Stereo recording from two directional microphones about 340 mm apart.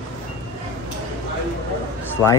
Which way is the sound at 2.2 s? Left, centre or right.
Centre.